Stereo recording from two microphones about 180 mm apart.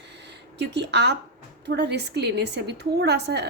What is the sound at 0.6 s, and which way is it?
A woman's voice, 70° right (ahead or behind).